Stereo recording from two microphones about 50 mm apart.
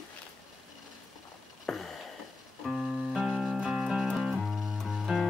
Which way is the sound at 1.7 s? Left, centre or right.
Centre.